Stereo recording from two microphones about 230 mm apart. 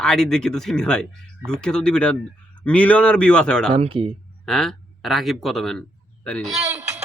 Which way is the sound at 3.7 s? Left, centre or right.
Right.